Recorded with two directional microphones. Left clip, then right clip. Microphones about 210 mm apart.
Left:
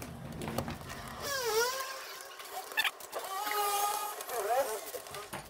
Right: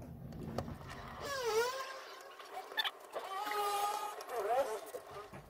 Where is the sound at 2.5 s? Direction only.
5° left (ahead or behind).